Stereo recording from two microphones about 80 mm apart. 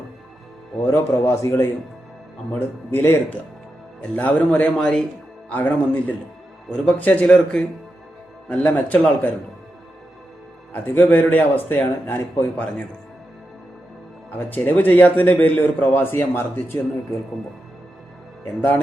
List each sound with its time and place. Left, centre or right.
0.9 s a man's voice: left
7.3 s speech: centre
10.7 s a man's voice: left
14.3 s a man's voice: left